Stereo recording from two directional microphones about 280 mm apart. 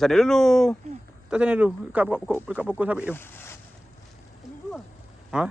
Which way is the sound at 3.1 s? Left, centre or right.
Centre.